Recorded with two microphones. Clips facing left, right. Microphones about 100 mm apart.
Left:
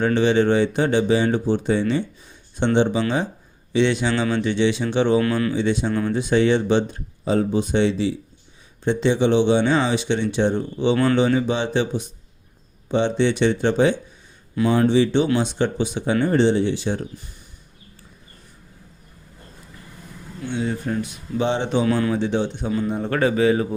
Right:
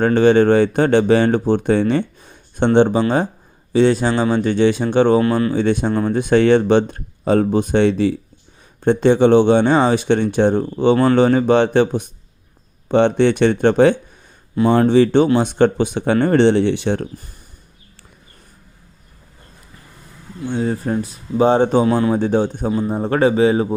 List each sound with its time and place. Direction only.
0.0 s speech: 50° right (ahead or behind)
20.5 s speech: 40° right (ahead or behind)